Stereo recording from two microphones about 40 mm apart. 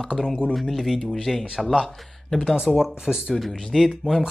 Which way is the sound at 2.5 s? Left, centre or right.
Centre.